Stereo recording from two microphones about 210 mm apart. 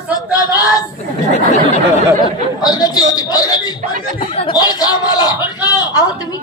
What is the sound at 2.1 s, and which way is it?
Speech, 20° left (ahead or behind).